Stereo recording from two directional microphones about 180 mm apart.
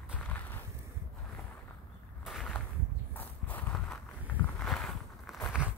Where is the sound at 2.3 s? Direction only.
Centre (ahead or behind).